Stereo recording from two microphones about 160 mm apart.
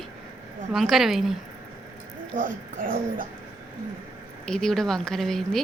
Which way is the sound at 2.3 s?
55° right (ahead or behind).